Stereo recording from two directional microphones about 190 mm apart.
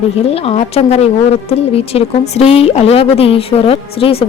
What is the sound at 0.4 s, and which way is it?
A woman's voice, 35° left (ahead or behind).